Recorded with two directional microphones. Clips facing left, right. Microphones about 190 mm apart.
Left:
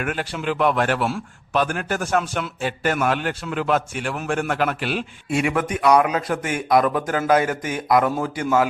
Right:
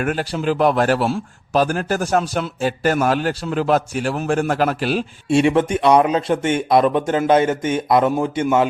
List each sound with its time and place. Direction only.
0.0 s a man's voice: 35° right (ahead or behind); by 8.6 s 20° right (ahead or behind)